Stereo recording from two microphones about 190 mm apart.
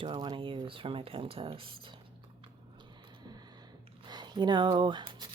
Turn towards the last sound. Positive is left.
turn(degrees=-25)  # may be behind; listen again after turning